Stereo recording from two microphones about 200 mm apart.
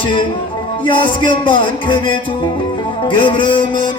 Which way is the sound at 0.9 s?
25° left (ahead or behind).